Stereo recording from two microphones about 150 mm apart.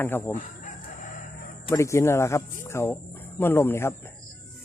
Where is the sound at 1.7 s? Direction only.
20° left (ahead or behind).